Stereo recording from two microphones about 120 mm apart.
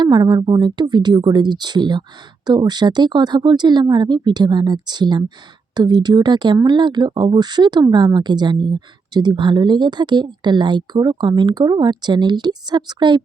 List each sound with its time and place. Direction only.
0.0 s speech: 35° right (ahead or behind)